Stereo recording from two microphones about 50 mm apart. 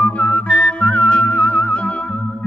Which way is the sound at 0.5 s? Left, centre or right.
Centre.